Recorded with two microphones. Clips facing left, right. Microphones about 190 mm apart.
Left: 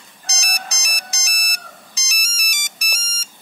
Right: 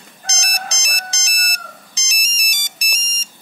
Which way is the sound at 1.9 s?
20° right (ahead or behind).